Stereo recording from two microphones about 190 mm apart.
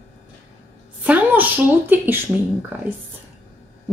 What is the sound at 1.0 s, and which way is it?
A woman's voice, 10° right (ahead or behind).